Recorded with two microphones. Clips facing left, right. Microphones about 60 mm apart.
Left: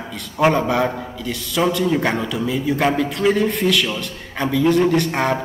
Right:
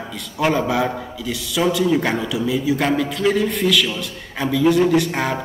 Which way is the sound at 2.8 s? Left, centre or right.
Centre.